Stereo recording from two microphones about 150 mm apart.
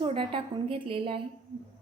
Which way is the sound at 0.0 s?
35° right (ahead or behind).